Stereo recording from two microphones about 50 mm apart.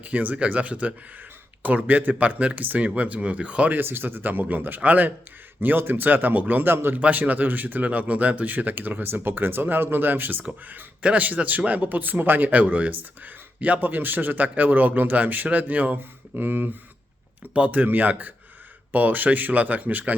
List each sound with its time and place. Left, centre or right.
0.0 s speech: right
3.8 s speech: right
5.5 s speech: right
7.0 s speech: right
11.0 s speech: right
17.5 s speech: right